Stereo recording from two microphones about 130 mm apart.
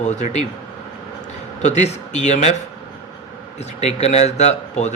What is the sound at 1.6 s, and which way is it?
Speech, 65° left (ahead or behind).